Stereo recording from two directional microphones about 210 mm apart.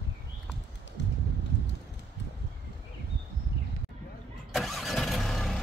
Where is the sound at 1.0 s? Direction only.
60° left (ahead or behind).